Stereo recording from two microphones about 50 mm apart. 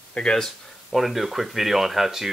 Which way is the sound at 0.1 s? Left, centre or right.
Centre.